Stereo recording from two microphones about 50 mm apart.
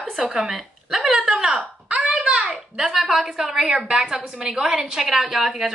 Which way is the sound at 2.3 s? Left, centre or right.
Right.